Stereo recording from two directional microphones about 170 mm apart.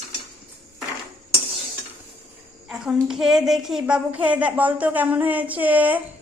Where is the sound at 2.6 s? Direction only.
5° right (ahead or behind).